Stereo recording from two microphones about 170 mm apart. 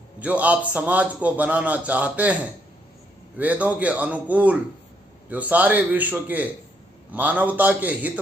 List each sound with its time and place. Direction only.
0.2 s a man's voice: 10° right (ahead or behind)
3.3 s a man's voice: 10° right (ahead or behind)